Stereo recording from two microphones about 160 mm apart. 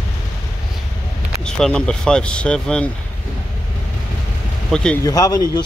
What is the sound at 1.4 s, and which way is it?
Speech, 5° left (ahead or behind).